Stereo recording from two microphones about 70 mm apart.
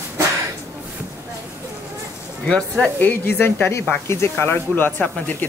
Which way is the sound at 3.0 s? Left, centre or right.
Left.